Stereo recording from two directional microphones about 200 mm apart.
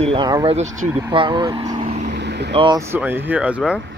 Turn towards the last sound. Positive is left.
turn(degrees=-5)  # may be behind; listen again after turning